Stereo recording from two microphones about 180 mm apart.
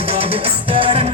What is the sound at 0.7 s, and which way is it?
Music, 30° right (ahead or behind).